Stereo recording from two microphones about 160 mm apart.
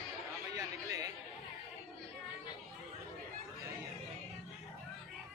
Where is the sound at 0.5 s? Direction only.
20° right (ahead or behind).